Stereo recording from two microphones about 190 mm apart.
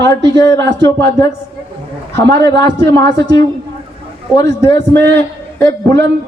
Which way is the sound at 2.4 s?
20° left (ahead or behind).